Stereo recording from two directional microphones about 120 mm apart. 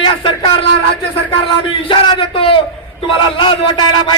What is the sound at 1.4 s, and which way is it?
A man's voice, 45° left (ahead or behind).